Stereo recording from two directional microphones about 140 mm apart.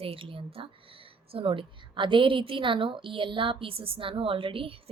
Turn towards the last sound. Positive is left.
turn(degrees=-40)  # may be behind; listen again after turning